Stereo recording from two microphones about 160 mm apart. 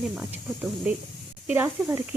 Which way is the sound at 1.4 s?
10° right (ahead or behind).